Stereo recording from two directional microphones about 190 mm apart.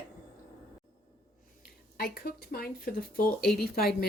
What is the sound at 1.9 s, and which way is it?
Speech, 50° left (ahead or behind).